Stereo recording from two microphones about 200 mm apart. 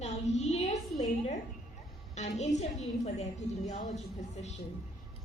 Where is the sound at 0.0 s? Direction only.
35° left (ahead or behind).